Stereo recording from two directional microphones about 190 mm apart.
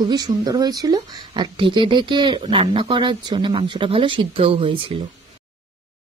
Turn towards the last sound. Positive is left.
turn(degrees=-30)  # may be behind; listen again after turning